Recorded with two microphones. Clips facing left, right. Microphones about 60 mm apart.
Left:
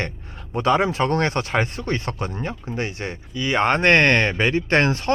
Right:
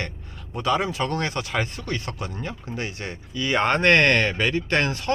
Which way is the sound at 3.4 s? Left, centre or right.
Centre.